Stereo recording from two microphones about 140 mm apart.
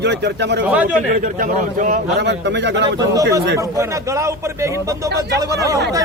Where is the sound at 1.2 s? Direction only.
70° right (ahead or behind).